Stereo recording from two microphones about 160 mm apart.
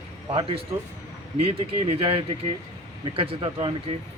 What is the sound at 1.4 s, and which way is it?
Speech, 40° right (ahead or behind).